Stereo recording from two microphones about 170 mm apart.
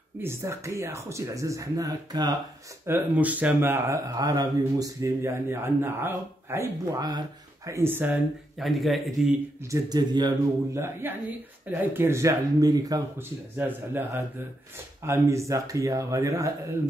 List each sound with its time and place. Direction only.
0.2 s a man's voice: 15° right (ahead or behind)
2.9 s a man's voice: 10° right (ahead or behind)
8.5 s speech: centre (ahead or behind)
9.7 s speech: 20° right (ahead or behind)
10.8 s a man's voice: 15° right (ahead or behind)
13.6 s a man's voice: 10° right (ahead or behind)